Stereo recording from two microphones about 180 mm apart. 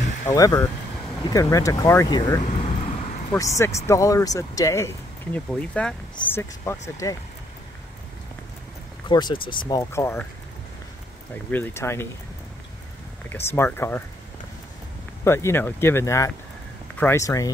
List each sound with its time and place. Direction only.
0.3 s speech: 20° left (ahead or behind)
2.5 s vehicle: 35° left (ahead or behind)
3.5 s speech: 15° left (ahead or behind)
9.1 s speech: 25° left (ahead or behind)
11.5 s speech: 10° left (ahead or behind)
13.3 s speech: 15° left (ahead or behind)
15.2 s speech: 15° left (ahead or behind)